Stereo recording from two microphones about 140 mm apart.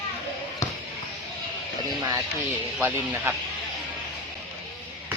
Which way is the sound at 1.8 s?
30° right (ahead or behind).